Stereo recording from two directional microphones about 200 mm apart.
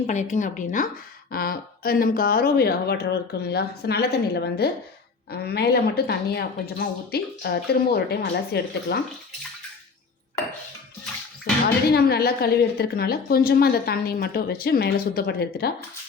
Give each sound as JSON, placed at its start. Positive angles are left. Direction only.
{"t": 0.1, "sound": "a woman's voice", "side_deg": 35}
{"t": 11.6, "sound": "a woman's voice", "side_deg": 50}